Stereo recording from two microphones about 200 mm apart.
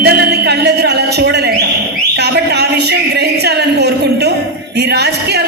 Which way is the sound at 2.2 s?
55° right (ahead or behind).